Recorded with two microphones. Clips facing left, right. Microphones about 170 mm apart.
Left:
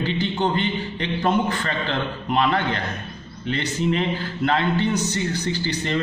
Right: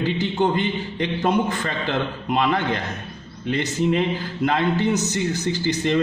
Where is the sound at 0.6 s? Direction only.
15° right (ahead or behind).